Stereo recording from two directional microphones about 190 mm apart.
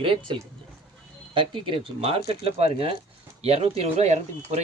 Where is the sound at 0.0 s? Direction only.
25° right (ahead or behind).